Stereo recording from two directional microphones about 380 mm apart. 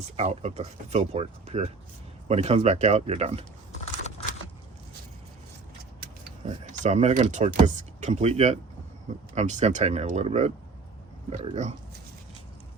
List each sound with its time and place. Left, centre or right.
0.2 s speech: centre
6.0 s speech: centre